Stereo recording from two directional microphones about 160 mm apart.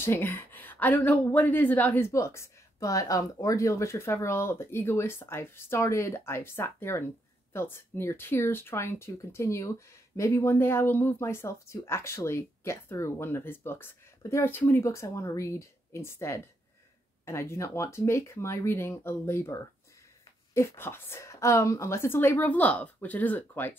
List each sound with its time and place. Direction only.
0.0 s speech: 15° left (ahead or behind)